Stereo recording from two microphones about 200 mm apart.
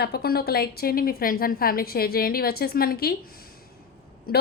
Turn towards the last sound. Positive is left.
turn(degrees=50)  # may be behind; listen again after turning